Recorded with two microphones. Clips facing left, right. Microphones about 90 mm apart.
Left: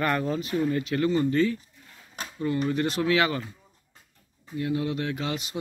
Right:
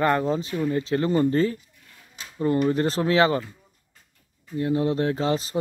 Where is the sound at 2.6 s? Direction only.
35° right (ahead or behind).